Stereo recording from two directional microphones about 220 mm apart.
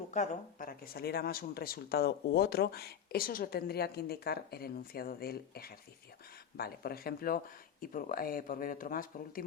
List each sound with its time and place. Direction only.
0.1 s speech: 35° left (ahead or behind)